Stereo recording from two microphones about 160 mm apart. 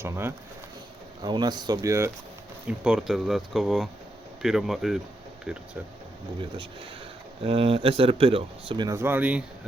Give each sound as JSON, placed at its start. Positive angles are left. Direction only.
{"t": 0.0, "sound": "speech", "side_deg": -15}
{"t": 1.2, "sound": "speech", "side_deg": -25}
{"t": 2.6, "sound": "speech", "side_deg": -5}
{"t": 7.4, "sound": "speech", "side_deg": -35}
{"t": 9.0, "sound": "speech", "side_deg": -10}